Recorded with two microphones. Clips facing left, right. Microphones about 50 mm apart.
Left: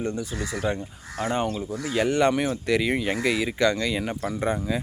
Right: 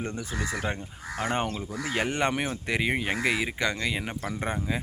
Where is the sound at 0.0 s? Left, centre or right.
Right.